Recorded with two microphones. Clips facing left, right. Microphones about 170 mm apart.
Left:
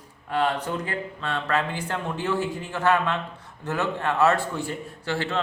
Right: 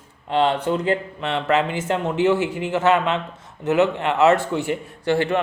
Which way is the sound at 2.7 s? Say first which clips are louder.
Right 4 dB; 20° right (ahead or behind).